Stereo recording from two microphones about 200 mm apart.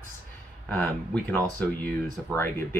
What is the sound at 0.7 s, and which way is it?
Speech, 10° left (ahead or behind).